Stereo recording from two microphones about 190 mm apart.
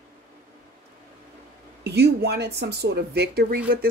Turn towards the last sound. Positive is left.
turn(degrees=-55)  # may be behind; listen again after turning